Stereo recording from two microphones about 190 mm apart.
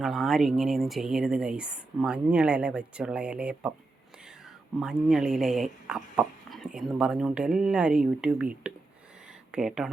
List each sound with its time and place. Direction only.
0.0 s speech: centre (ahead or behind)
4.8 s speech: centre (ahead or behind)